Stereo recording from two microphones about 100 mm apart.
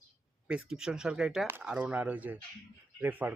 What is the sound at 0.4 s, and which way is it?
Speech, 10° right (ahead or behind).